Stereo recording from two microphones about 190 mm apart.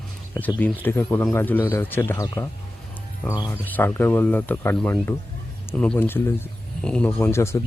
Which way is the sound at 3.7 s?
10° left (ahead or behind).